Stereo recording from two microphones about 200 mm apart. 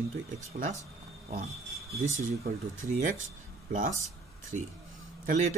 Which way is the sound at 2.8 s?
40° right (ahead or behind).